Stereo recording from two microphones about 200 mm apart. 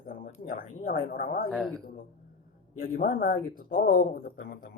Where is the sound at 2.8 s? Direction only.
45° left (ahead or behind).